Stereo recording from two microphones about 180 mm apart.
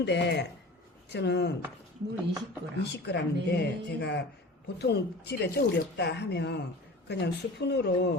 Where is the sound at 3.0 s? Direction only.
70° left (ahead or behind).